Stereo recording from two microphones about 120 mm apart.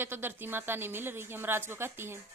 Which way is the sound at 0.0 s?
20° right (ahead or behind).